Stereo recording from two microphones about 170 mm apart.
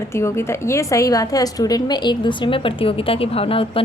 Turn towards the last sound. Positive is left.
turn(degrees=35)  # may be behind; listen again after turning